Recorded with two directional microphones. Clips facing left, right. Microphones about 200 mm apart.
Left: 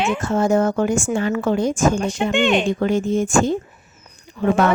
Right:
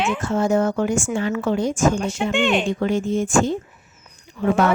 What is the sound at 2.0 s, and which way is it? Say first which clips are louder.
Speech: left 2 dB; 5° right (ahead or behind).